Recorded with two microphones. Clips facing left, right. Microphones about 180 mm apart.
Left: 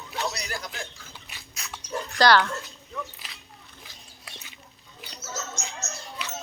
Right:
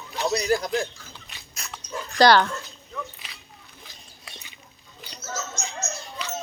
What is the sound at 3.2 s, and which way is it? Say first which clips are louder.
Biting: right 1 dB; centre (ahead or behind).